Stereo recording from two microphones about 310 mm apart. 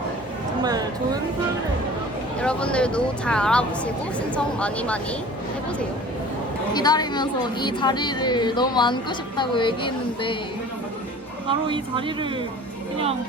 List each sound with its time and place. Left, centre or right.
0.6 s a sound: centre
2.4 s speech: centre
6.7 s a woman's voice: centre
11.4 s speech: centre